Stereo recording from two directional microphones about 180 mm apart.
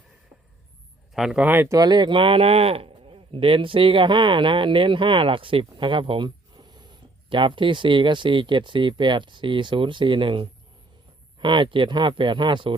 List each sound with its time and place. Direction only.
1.1 s speech: centre (ahead or behind); by 12.7 s 25° right (ahead or behind)